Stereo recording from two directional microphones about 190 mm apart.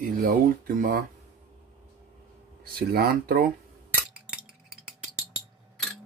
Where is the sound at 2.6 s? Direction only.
50° right (ahead or behind).